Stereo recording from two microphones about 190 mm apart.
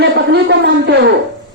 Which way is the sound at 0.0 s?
60° right (ahead or behind).